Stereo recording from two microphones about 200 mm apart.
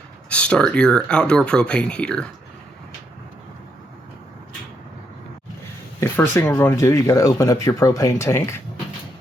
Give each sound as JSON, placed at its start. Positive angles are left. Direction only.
{"t": 0.3, "sound": "speech", "side_deg": 5}
{"t": 6.0, "sound": "speech", "side_deg": 10}